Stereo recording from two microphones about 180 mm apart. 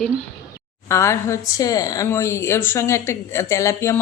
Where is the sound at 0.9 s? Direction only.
15° left (ahead or behind).